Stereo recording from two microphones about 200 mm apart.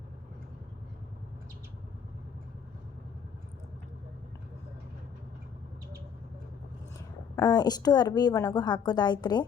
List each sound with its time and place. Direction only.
7.3 s a woman's voice: 20° left (ahead or behind)